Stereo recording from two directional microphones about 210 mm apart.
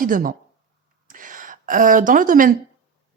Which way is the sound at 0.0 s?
40° right (ahead or behind).